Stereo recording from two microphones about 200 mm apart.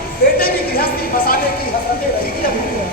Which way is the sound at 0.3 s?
45° left (ahead or behind).